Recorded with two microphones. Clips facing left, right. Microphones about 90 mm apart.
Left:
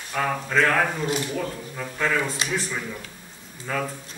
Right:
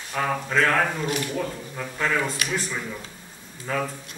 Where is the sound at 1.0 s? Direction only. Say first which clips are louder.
Left 1 dB; 25° left (ahead or behind).